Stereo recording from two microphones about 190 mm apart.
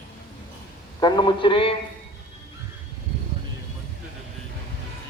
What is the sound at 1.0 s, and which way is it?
Speech, 25° left (ahead or behind).